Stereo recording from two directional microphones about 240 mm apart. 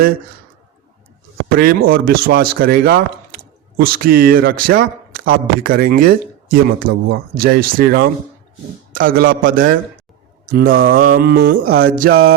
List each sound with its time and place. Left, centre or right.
1.5 s speech: right